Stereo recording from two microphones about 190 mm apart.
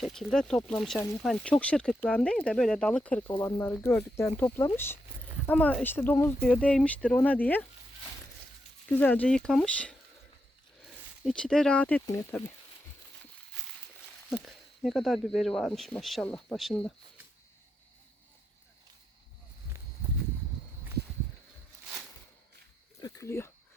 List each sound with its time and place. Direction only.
0.0 s speech: centre (ahead or behind)
8.9 s speech: 10° left (ahead or behind)
11.3 s speech: 5° left (ahead or behind)
14.4 s speech: centre (ahead or behind)
23.0 s cricket: 20° left (ahead or behind)